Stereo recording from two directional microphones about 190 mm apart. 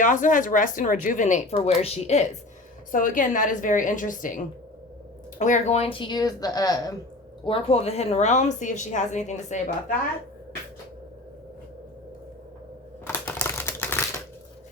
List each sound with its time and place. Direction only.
0.0 s speech: 45° left (ahead or behind)
2.9 s a woman's voice: 45° left (ahead or behind)
13.1 s typewriter: 10° left (ahead or behind)